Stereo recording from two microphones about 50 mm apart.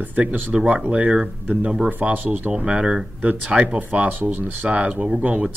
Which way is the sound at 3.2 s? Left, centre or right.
Right.